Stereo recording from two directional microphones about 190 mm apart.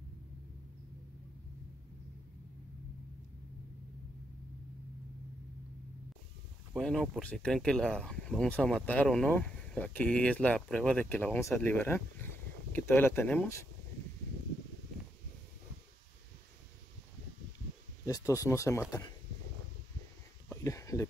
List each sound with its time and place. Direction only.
6.7 s speech: 5° left (ahead or behind)
18.0 s speech: 20° left (ahead or behind)
20.4 s a sound: 15° left (ahead or behind)